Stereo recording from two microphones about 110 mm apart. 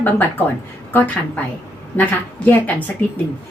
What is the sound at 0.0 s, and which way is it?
A woman's voice, 15° left (ahead or behind).